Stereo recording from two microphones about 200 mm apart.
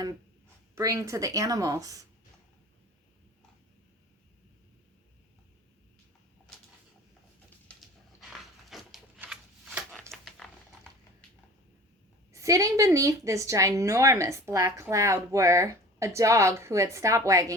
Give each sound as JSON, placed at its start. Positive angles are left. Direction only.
{"t": 0.8, "sound": "a woman's voice", "side_deg": -15}
{"t": 7.7, "sound": "dog", "side_deg": 0}
{"t": 12.3, "sound": "a woman's voice", "side_deg": -15}